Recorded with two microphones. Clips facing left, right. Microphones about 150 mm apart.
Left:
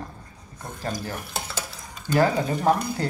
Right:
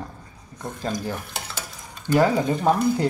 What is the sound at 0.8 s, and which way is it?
Stir, 20° right (ahead or behind).